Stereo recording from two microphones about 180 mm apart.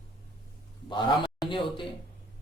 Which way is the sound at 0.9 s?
25° left (ahead or behind).